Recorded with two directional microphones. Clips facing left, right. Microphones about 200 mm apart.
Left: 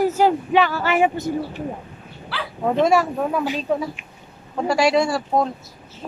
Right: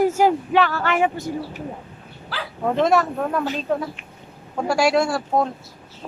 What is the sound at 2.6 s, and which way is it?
Speech, 5° left (ahead or behind).